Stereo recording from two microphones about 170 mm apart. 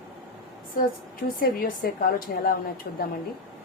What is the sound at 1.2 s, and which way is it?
A woman's voice, 70° left (ahead or behind).